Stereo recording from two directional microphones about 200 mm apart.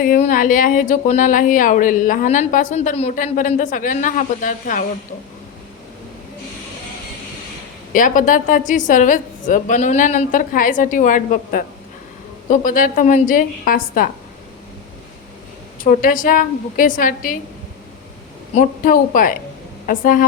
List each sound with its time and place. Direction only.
0.0 s a woman's voice: 40° left (ahead or behind)
7.9 s a woman's voice: 40° left (ahead or behind)
15.8 s a woman's voice: 45° left (ahead or behind)
18.5 s a woman's voice: 40° left (ahead or behind)